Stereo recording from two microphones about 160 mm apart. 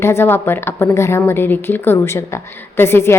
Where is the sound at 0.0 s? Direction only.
15° left (ahead or behind).